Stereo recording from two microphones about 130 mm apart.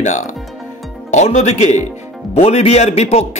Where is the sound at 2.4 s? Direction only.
55° left (ahead or behind).